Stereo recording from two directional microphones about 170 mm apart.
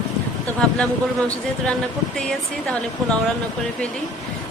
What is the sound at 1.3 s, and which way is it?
Speech, 5° left (ahead or behind).